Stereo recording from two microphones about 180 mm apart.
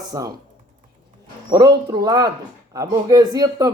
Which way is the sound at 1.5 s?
25° right (ahead or behind).